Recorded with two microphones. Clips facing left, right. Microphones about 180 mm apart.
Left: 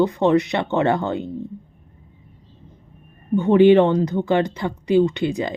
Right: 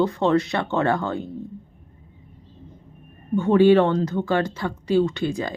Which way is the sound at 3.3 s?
20° left (ahead or behind).